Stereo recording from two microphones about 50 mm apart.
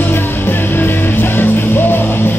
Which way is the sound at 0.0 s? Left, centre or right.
Left.